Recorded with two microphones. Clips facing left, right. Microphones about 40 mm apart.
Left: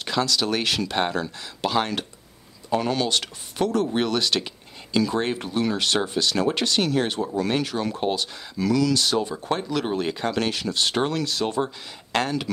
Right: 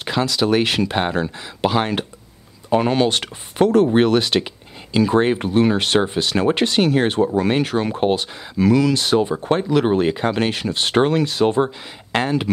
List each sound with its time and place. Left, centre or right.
0.0 s speech: right